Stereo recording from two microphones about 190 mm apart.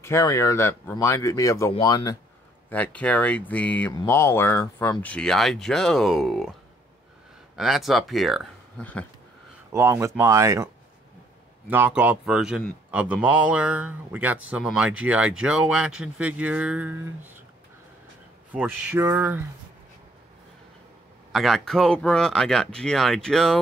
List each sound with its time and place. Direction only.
0.0 s speech: 15° left (ahead or behind)
2.7 s speech: 10° left (ahead or behind)
7.5 s speech: centre (ahead or behind)
9.7 s a man's voice: 15° right (ahead or behind)
11.7 s a man's voice: 10° right (ahead or behind)
18.5 s a man's voice: 10° right (ahead or behind)
21.3 s speech: centre (ahead or behind)